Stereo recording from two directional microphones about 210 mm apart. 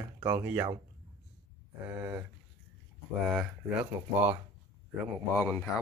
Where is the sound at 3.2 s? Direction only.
5° right (ahead or behind).